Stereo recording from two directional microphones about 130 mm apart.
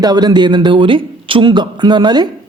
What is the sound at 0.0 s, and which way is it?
A woman's voice, 30° right (ahead or behind).